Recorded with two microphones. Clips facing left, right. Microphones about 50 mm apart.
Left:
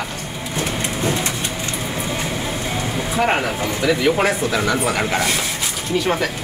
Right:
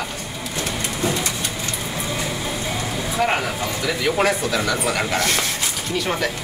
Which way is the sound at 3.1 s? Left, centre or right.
Left.